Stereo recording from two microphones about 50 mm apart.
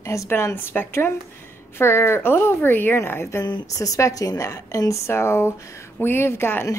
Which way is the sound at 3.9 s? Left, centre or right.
Left.